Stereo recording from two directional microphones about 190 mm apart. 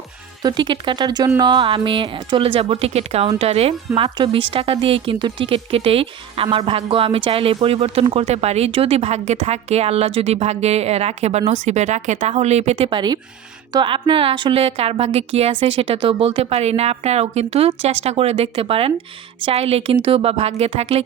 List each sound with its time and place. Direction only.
0.4 s a woman's voice: 25° right (ahead or behind)